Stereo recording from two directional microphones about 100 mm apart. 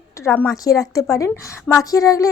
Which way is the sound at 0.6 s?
35° left (ahead or behind).